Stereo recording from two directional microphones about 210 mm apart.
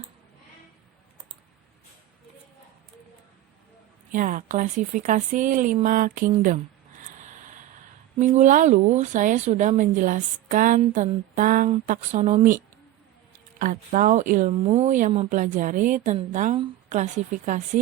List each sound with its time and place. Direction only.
4.1 s a woman's voice: 40° right (ahead or behind)
8.2 s a woman's voice: 35° right (ahead or behind)
13.6 s a woman's voice: 40° right (ahead or behind)